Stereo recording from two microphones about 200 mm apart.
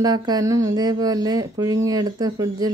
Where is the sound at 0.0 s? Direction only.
20° right (ahead or behind).